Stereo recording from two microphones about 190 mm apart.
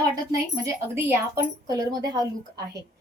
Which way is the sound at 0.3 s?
15° right (ahead or behind).